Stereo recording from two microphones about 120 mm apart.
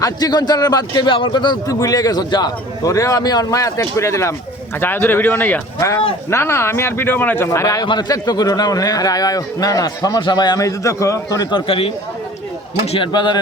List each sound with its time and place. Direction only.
0.0 s a man's voice: 35° left (ahead or behind)
12.8 s a man's voice: 55° left (ahead or behind)
13.1 s a man's voice: 40° left (ahead or behind)